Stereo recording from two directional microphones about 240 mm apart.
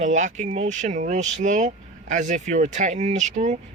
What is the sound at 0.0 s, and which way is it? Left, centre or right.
Speech, right.